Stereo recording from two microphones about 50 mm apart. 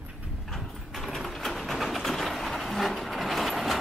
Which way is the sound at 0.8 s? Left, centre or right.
Centre.